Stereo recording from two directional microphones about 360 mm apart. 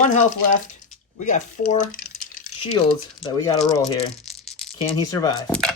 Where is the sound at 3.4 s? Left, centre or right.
Centre.